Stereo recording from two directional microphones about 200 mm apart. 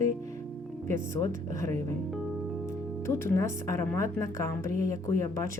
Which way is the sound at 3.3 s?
15° left (ahead or behind).